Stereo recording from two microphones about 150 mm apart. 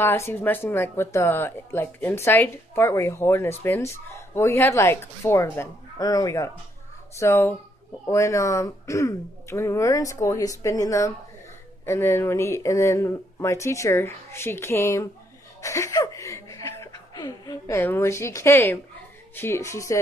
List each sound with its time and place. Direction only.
0.0 s speech: 15° left (ahead or behind)